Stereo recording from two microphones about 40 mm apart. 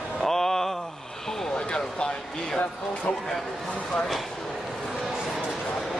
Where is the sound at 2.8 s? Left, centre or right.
Left.